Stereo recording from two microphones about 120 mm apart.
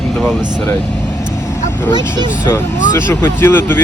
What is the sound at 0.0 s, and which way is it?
Vehicle, 5° left (ahead or behind).